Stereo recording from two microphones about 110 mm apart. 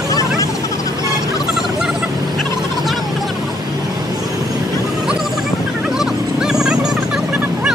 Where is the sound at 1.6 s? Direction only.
5° right (ahead or behind).